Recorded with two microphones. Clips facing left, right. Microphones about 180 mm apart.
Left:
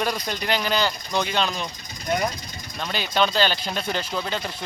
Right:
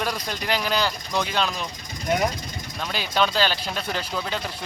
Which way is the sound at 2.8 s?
5° right (ahead or behind).